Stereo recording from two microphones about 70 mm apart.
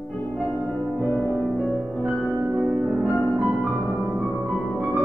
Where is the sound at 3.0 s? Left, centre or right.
Centre.